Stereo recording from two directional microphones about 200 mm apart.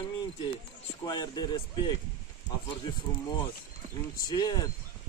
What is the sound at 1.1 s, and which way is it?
Speech, 20° left (ahead or behind).